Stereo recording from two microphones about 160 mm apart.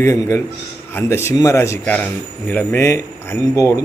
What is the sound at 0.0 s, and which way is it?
A man's voice, 20° left (ahead or behind).